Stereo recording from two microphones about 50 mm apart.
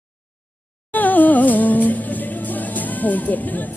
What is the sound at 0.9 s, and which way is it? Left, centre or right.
Music, left.